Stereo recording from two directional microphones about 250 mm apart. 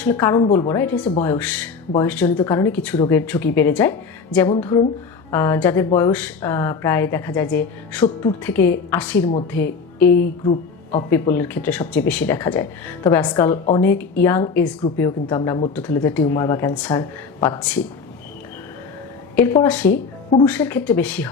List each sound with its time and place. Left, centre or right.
0.0 s speech: centre
10.1 s a woman's voice: left
10.4 s speech: left
11.1 s speech: centre
15.7 s speech: centre
19.4 s speech: centre